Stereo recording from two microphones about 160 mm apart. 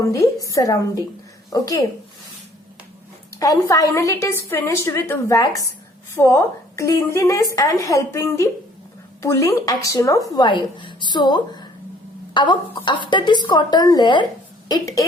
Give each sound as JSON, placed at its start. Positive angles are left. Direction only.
{"t": 0.0, "sound": "a woman's voice", "side_deg": 20}
{"t": 3.3, "sound": "a woman's voice", "side_deg": 20}